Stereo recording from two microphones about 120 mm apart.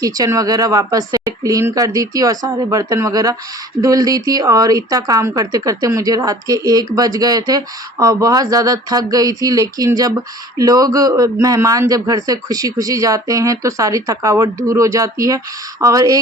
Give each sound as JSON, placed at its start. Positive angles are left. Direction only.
{"t": 0.0, "sound": "a woman's voice", "side_deg": -30}